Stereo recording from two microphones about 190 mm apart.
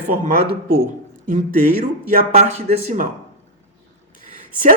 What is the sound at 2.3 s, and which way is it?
Speech, 35° right (ahead or behind).